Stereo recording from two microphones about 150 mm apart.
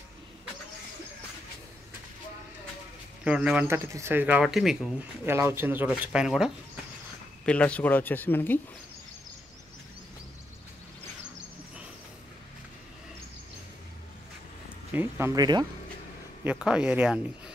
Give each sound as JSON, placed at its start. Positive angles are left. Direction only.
{"t": 3.3, "sound": "speech", "side_deg": -5}
{"t": 5.2, "sound": "speech", "side_deg": -15}
{"t": 7.4, "sound": "speech", "side_deg": 10}
{"t": 14.9, "sound": "speech", "side_deg": -15}
{"t": 16.4, "sound": "speech", "side_deg": -5}